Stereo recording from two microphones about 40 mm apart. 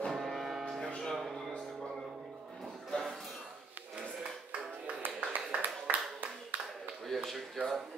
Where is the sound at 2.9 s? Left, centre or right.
Centre.